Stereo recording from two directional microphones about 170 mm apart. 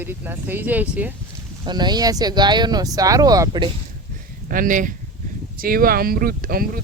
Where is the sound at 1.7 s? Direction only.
25° right (ahead or behind).